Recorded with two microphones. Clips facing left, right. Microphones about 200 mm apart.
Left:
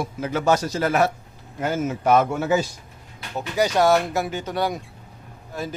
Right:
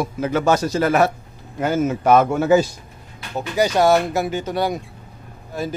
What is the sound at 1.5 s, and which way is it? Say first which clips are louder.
Speech: right 5 dB; 80° right.